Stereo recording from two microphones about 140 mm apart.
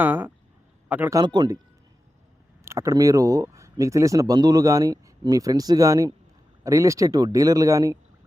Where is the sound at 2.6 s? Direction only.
20° right (ahead or behind).